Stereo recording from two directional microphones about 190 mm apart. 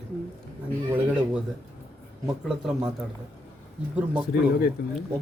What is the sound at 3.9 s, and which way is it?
Speech, 5° right (ahead or behind).